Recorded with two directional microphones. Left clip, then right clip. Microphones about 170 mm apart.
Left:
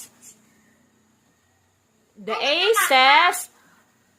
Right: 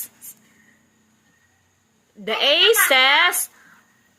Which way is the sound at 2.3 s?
10° right (ahead or behind).